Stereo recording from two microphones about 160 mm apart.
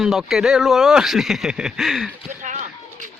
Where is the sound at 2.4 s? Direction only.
50° right (ahead or behind).